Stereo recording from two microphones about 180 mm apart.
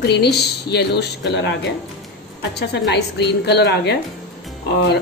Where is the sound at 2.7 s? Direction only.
65° left (ahead or behind).